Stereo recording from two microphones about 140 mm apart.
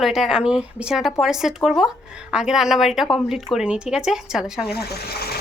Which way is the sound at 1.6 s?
15° left (ahead or behind).